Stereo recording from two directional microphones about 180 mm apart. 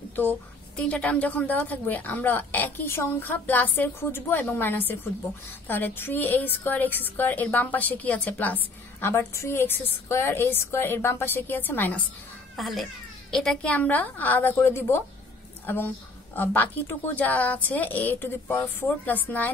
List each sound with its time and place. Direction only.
0.7 s a woman's voice: 5° left (ahead or behind)
12.5 s a woman's voice: centre (ahead or behind)